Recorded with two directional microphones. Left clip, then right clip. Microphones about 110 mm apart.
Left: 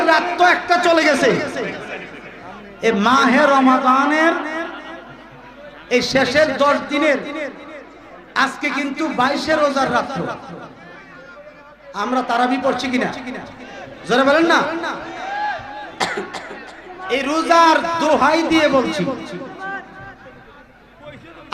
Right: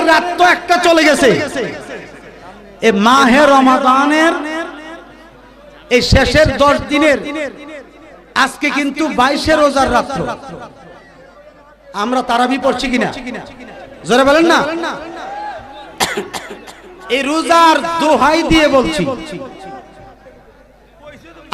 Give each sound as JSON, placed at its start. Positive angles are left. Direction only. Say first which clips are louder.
{"t": 0.0, "sound": "a man's voice", "louder": "right 4 dB", "side_deg": -45}
{"t": 4.7, "sound": "a sound", "louder": "right 2 dB", "side_deg": -40}
{"t": 5.9, "sound": "a man's voice", "louder": "right 5 dB", "side_deg": -45}
{"t": 11.9, "sound": "a man's voice", "louder": "right 4 dB", "side_deg": -45}